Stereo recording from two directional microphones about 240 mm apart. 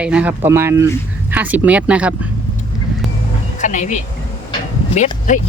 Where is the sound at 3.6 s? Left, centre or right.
Left.